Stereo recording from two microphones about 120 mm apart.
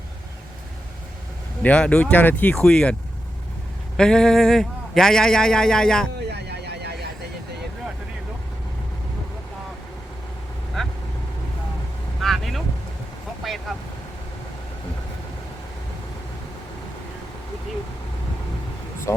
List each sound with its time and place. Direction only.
1.6 s speech: 10° left (ahead or behind)
3.9 s speech: 5° left (ahead or behind)
10.8 s vehicle: 5° left (ahead or behind)
12.2 s vehicle: centre (ahead or behind)
19.1 s speech: 25° left (ahead or behind)